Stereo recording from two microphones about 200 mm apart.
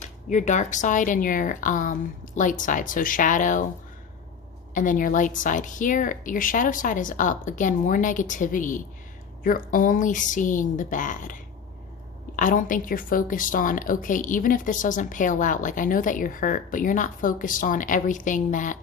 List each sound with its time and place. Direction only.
0.3 s a woman's voice: 35° left (ahead or behind)
4.7 s a woman's voice: 40° left (ahead or behind)
12.4 s a woman's voice: 40° left (ahead or behind)